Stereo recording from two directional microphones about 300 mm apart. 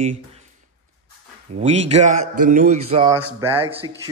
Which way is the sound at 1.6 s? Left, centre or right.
Right.